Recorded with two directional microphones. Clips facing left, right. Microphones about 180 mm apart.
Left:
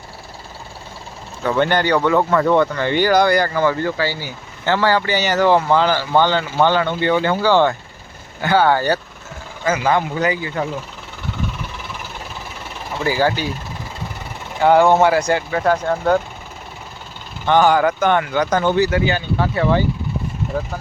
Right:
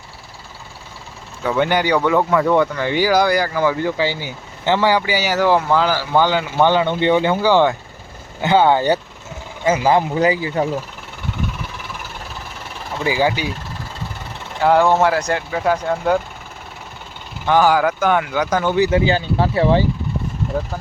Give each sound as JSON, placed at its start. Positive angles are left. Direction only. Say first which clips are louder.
{"t": 1.5, "sound": "speech", "louder": "even", "side_deg": -10}
{"t": 13.1, "sound": "speech", "louder": "even", "side_deg": -15}
{"t": 14.6, "sound": "speech", "louder": "left 2 dB", "side_deg": 0}
{"t": 17.4, "sound": "speech", "louder": "left 1 dB", "side_deg": -5}
{"t": 18.8, "sound": "speech", "louder": "right 2 dB", "side_deg": -25}